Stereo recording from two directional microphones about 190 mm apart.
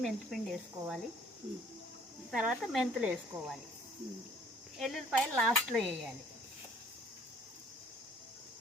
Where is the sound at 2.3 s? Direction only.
5° right (ahead or behind).